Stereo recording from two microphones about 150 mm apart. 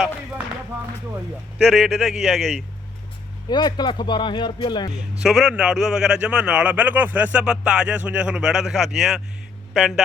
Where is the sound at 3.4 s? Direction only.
30° left (ahead or behind).